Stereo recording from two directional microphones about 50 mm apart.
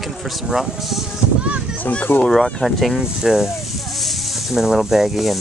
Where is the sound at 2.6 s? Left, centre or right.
Centre.